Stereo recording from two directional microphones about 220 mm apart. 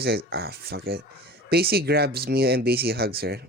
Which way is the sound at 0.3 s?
45° right (ahead or behind).